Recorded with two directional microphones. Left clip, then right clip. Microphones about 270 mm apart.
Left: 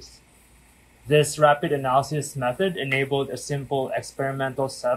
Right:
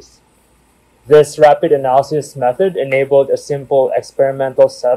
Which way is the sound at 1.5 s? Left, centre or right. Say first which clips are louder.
Right 10 dB; centre.